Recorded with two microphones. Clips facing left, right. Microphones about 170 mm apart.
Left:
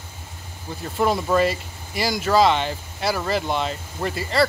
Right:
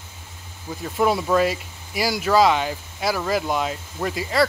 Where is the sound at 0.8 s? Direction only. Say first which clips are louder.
Right 1 dB; 5° right (ahead or behind).